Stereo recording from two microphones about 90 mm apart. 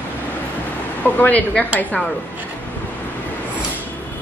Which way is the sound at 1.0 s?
20° left (ahead or behind).